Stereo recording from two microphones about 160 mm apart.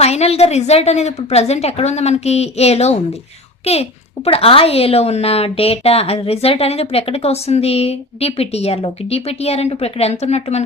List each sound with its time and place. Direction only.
0.0 s a woman's voice: 40° left (ahead or behind)